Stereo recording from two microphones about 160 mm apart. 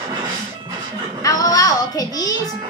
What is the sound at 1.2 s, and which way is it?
Child singing, 20° left (ahead or behind).